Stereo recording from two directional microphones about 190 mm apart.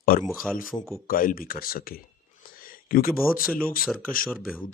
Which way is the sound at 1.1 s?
50° left (ahead or behind).